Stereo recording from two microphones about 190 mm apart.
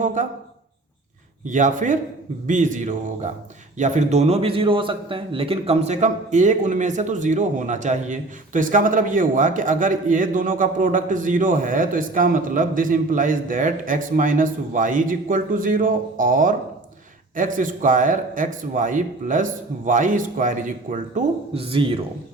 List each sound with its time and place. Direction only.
0.0 s speech: 40° right (ahead or behind)
1.5 s a man's voice: 40° right (ahead or behind)